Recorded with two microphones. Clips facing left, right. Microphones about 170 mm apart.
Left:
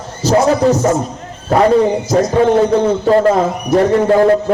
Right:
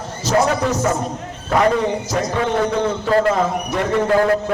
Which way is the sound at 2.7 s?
35° left (ahead or behind).